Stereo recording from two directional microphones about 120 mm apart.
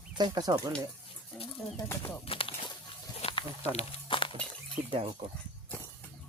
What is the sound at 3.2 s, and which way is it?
Snake, 60° left (ahead or behind).